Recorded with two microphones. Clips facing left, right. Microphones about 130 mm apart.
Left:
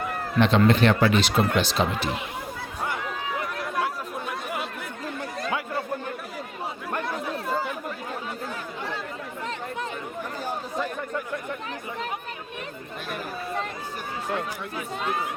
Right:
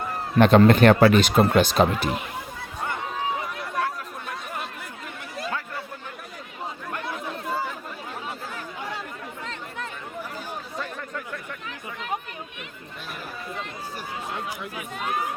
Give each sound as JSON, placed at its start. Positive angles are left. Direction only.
{"t": 0.3, "sound": "speech", "side_deg": -50}
{"t": 3.6, "sound": "chatter", "side_deg": 5}
{"t": 14.8, "sound": "chatter", "side_deg": 30}